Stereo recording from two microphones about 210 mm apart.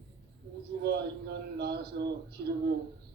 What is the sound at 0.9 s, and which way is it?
A man's voice, 50° right (ahead or behind).